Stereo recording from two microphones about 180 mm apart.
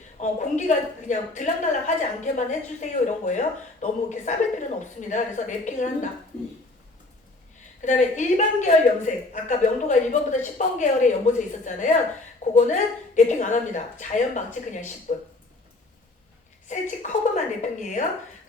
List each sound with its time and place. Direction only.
0.2 s a woman's voice: 45° left (ahead or behind)
7.8 s a woman's voice: 45° left (ahead or behind)
16.6 s a woman's voice: 40° left (ahead or behind)